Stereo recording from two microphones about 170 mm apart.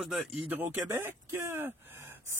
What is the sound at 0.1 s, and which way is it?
Speech, centre (ahead or behind).